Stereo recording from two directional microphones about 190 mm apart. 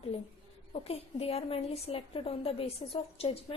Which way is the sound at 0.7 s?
30° left (ahead or behind).